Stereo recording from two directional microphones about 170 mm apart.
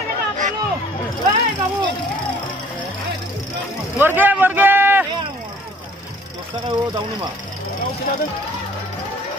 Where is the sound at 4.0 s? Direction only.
10° right (ahead or behind).